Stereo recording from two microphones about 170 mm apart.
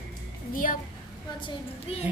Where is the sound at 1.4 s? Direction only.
30° left (ahead or behind).